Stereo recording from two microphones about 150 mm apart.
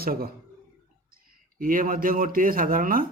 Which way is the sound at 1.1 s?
70° right (ahead or behind).